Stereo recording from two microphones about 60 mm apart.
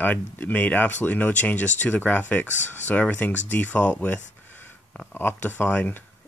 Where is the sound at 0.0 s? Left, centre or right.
Left.